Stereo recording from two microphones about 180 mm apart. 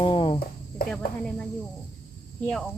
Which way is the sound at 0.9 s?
5° left (ahead or behind).